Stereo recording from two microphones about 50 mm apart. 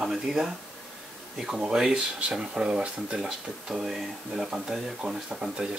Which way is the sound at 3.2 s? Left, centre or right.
Centre.